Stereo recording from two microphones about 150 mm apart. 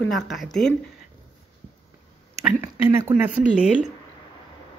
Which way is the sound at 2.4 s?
15° right (ahead or behind).